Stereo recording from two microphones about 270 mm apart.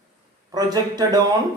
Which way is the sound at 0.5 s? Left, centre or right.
Centre.